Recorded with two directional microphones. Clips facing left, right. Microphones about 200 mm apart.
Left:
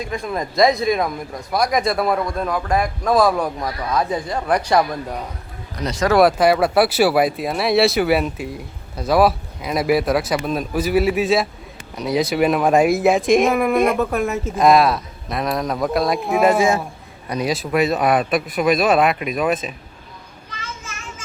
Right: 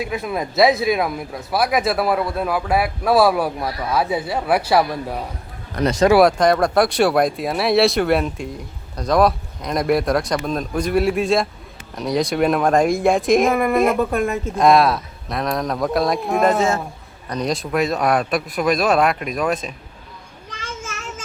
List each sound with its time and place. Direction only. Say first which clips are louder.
0.0 s speech: right 1 dB; 5° right (ahead or behind)
5.7 s speech: right 6 dB; 55° right (ahead or behind)
6.1 s speech: left 4 dB; 5° left (ahead or behind)